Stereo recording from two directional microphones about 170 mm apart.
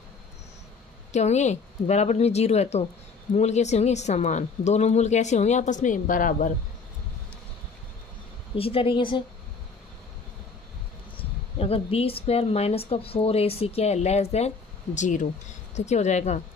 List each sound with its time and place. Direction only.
1.1 s a woman's voice: 40° left (ahead or behind)
8.5 s a woman's voice: 35° left (ahead or behind)
11.5 s a woman's voice: 35° left (ahead or behind)